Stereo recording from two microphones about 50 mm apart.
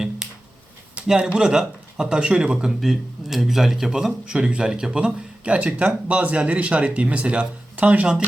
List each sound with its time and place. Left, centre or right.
1.0 s speech: centre
2.6 s speech: centre; by 8.2 s right